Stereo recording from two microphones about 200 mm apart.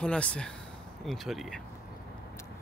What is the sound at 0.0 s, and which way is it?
Speech, 5° left (ahead or behind).